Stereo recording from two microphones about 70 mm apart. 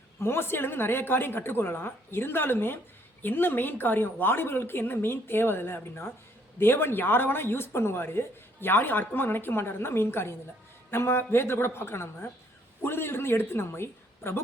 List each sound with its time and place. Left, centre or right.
0.2 s a woman's voice: left